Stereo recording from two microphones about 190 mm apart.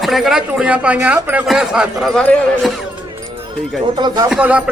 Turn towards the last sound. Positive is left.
turn(degrees=-5)  # may be behind; listen again after turning